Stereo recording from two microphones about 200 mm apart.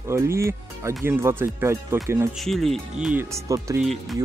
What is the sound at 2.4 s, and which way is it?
Speech, centre (ahead or behind).